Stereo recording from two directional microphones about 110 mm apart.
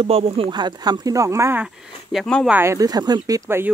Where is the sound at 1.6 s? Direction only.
5° right (ahead or behind).